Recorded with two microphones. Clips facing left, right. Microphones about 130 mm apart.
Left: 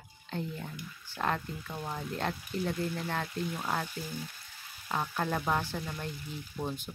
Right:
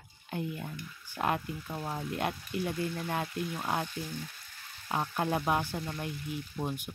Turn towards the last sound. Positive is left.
turn(degrees=-10)  # may be behind; listen again after turning